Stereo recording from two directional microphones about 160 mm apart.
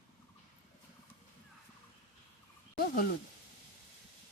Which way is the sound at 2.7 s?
70° left (ahead or behind).